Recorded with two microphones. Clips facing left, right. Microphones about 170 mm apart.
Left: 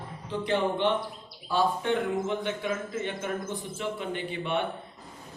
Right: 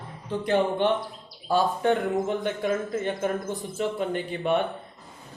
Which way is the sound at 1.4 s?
45° right (ahead or behind).